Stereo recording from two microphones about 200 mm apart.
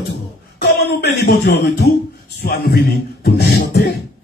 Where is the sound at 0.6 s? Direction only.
55° left (ahead or behind).